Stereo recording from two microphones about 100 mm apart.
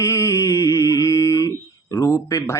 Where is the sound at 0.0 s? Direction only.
30° left (ahead or behind).